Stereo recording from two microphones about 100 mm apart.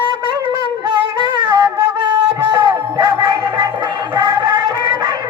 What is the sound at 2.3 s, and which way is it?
Music, 45° right (ahead or behind).